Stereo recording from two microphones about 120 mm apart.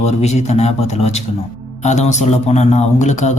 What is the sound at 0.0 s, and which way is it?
A man's voice, 65° left (ahead or behind).